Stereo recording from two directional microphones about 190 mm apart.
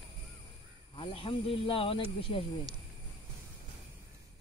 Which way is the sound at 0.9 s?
30° left (ahead or behind).